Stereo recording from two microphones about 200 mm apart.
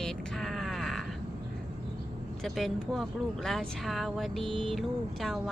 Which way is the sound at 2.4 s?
Centre (ahead or behind).